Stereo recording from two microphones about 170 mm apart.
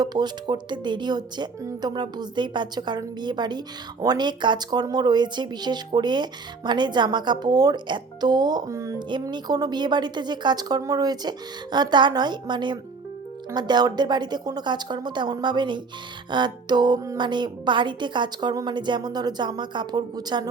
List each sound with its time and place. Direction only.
0.0 s speech: 25° right (ahead or behind)